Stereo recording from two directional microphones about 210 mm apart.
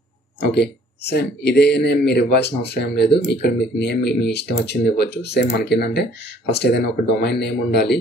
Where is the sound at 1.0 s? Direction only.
55° left (ahead or behind).